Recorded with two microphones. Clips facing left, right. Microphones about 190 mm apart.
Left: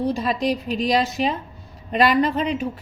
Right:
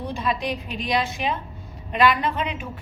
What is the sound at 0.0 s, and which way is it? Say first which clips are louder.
A woman's voice: left 5 dB; 40° left (ahead or behind).